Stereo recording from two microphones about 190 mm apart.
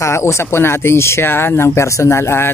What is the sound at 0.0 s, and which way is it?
Speech, 15° left (ahead or behind).